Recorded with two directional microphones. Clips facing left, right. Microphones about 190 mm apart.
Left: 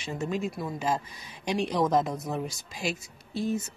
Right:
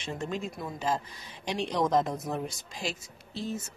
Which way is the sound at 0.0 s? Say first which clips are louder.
Left 3 dB; 5° left (ahead or behind).